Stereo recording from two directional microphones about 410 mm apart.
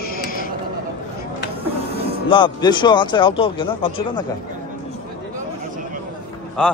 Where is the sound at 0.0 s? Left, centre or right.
Left.